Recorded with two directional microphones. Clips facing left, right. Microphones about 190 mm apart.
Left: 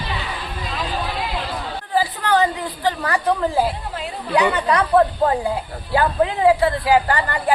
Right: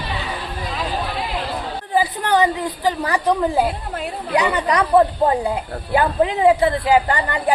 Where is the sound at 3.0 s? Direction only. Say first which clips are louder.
Right 2 dB; 15° right (ahead or behind).